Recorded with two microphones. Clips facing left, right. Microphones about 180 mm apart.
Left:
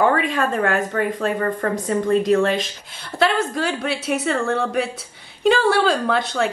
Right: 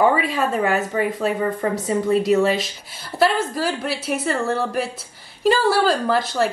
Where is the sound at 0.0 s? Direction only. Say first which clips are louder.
Even; 10° right (ahead or behind).